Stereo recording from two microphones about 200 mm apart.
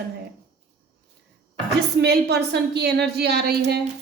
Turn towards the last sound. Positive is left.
turn(degrees=-55)  # may be behind; listen again after turning